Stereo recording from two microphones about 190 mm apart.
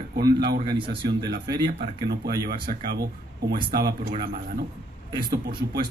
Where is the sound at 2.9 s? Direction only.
55° right (ahead or behind).